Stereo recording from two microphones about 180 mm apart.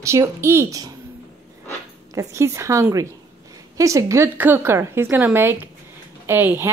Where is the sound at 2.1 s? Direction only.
15° right (ahead or behind).